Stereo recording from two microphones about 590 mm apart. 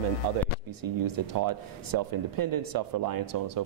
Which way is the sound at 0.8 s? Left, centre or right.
Right.